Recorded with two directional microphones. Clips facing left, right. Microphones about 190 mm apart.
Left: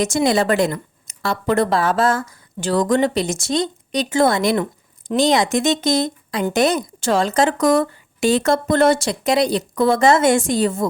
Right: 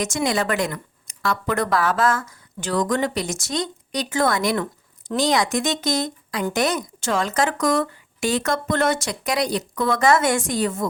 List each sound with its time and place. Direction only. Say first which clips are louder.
0.0 s a woman's voice: left 5 dB; 30° left (ahead or behind)